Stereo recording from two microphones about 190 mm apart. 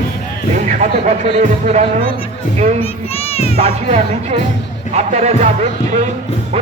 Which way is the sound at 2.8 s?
30° left (ahead or behind).